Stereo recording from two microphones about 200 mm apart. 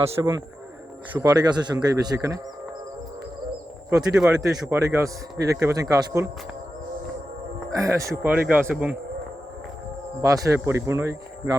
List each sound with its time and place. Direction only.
0.0 s speech: 20° right (ahead or behind)
3.8 s a man's voice: 5° right (ahead or behind)
7.8 s a man's voice: 15° right (ahead or behind)
10.2 s a man's voice: 15° right (ahead or behind)